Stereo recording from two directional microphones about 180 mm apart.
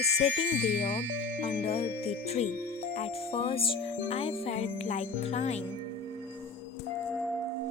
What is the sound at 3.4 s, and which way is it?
Speech, 30° left (ahead or behind).